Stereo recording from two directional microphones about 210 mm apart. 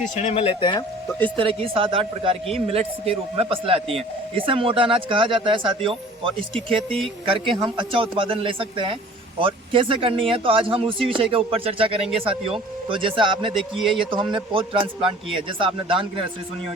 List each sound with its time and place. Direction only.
0.2 s speech: 30° left (ahead or behind)
1.4 s a man's voice: 25° right (ahead or behind)
13.5 s speech: centre (ahead or behind)
14.0 s a man's voice: 25° right (ahead or behind)